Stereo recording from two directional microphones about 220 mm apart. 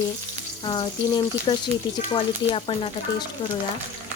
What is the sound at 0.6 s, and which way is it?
A woman's voice, 20° left (ahead or behind).